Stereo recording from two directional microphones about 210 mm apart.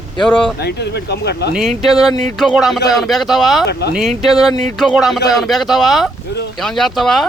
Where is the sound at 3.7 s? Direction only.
50° left (ahead or behind).